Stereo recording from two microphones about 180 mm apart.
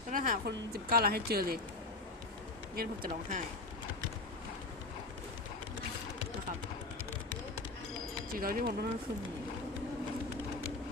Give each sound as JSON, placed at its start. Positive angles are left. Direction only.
{"t": 0.1, "sound": "speech", "side_deg": -50}
{"t": 2.7, "sound": "speech", "side_deg": -55}
{"t": 8.4, "sound": "speech", "side_deg": -55}